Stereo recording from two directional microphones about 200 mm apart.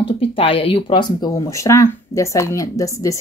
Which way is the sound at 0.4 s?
25° left (ahead or behind).